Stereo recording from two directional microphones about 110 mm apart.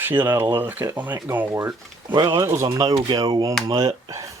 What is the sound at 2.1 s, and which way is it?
Speech, 45° right (ahead or behind).